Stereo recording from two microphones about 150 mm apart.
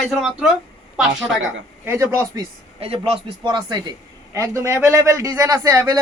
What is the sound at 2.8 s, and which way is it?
A man's voice, 40° right (ahead or behind).